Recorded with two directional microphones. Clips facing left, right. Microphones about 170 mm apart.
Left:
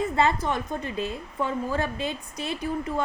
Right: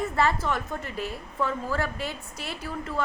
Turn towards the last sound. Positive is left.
turn(degrees=20)  # may be behind; listen again after turning